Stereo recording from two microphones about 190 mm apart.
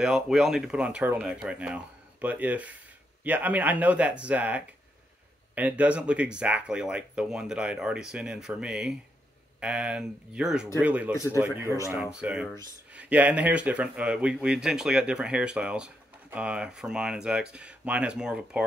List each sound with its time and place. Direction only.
0.0 s speech: 5° right (ahead or behind)
11.1 s speech: 15° left (ahead or behind)
11.9 s speech: 5° right (ahead or behind)